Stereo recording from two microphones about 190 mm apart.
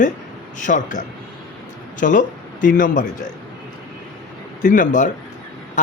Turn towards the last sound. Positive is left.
turn(degrees=45)  # may be behind; listen again after turning